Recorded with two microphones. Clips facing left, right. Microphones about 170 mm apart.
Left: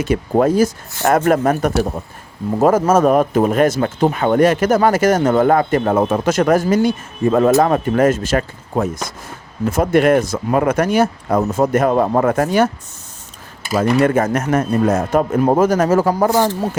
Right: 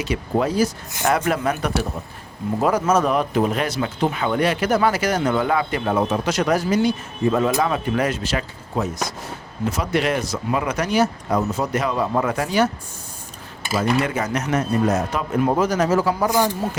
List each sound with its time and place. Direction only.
0.0 s speech: 50° left (ahead or behind)
13.7 s speech: 50° left (ahead or behind)